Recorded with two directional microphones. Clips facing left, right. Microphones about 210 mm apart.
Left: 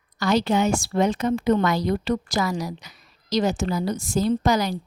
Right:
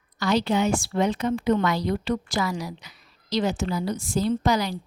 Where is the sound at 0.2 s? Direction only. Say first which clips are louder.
Left 2 dB; 45° left (ahead or behind).